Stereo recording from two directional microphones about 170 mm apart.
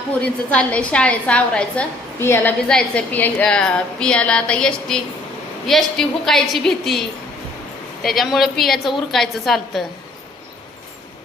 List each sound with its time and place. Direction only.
0.2 s a woman's voice: 5° left (ahead or behind)
8.0 s a woman's voice: centre (ahead or behind)